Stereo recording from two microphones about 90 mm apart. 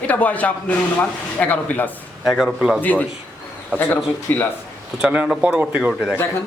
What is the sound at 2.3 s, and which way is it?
Speech, 5° right (ahead or behind).